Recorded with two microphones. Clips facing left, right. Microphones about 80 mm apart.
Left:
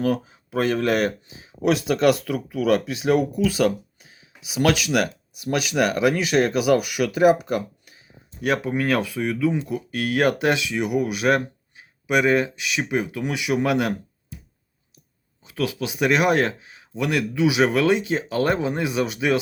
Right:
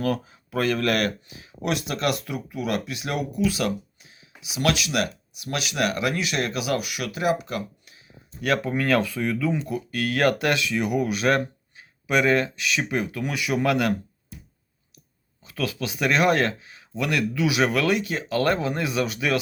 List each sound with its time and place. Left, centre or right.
0.0 s speech: centre
2.7 s speech: left
8.4 s speech: centre
15.4 s speech: centre